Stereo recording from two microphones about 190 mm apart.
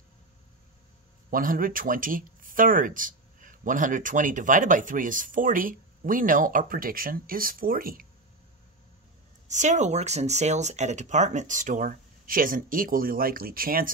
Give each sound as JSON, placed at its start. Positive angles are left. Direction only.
{"t": 1.3, "sound": "speech", "side_deg": -45}
{"t": 9.5, "sound": "speech", "side_deg": -40}